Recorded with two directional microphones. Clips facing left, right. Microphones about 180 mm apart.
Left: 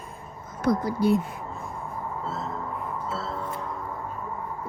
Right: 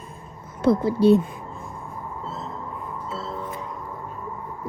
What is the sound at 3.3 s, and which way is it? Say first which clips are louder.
Music: even; 15° right (ahead or behind).